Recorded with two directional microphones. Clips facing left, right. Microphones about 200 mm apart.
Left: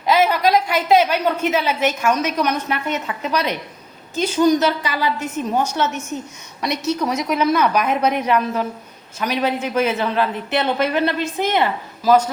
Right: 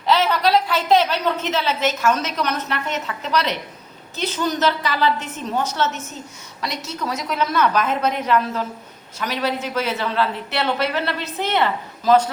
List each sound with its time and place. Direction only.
0.0 s a woman's voice: 10° left (ahead or behind)
7.0 s a woman's voice: 15° left (ahead or behind)